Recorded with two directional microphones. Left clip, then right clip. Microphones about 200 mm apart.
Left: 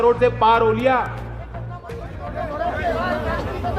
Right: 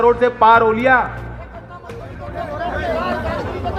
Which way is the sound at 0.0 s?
20° right (ahead or behind).